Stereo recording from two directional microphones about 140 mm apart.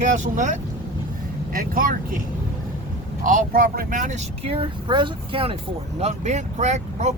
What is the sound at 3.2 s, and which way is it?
Speech, 75° right (ahead or behind).